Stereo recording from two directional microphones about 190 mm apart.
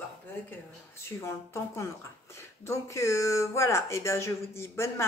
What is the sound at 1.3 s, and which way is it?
Speech, 15° left (ahead or behind).